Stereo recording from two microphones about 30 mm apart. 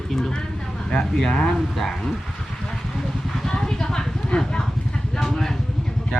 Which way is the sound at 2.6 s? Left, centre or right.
Centre.